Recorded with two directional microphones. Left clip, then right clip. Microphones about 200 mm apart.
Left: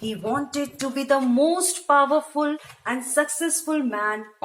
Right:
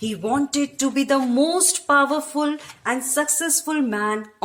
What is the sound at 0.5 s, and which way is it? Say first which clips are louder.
Speech: right 5 dB; 55° right (ahead or behind).